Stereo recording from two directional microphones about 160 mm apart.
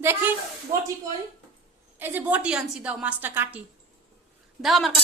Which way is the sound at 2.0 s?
10° right (ahead or behind).